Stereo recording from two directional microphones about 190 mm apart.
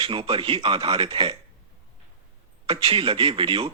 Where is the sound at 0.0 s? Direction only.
30° right (ahead or behind).